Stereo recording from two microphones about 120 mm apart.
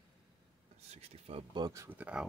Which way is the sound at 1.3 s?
45° right (ahead or behind).